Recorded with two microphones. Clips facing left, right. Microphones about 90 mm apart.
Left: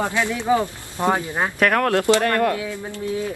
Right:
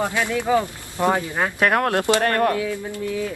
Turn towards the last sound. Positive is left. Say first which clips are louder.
# even
turn(degrees=20)  # may be behind; listen again after turning